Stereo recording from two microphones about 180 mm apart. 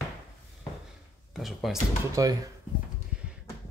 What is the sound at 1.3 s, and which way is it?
Speech, centre (ahead or behind).